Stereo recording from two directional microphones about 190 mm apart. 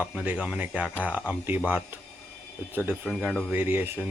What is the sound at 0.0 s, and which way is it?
Speech, 5° right (ahead or behind).